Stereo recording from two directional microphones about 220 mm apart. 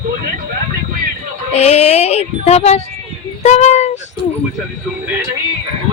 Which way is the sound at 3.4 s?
30° left (ahead or behind).